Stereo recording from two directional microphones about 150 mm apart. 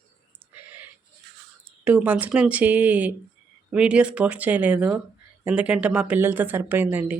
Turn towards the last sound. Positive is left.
turn(degrees=-10)  # may be behind; listen again after turning